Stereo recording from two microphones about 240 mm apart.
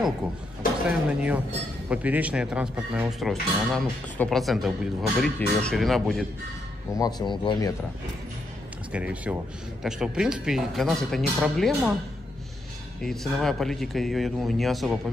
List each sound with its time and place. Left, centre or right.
0.8 s speech: centre
7.0 s speech: centre
8.9 s speech: centre
13.0 s speech: centre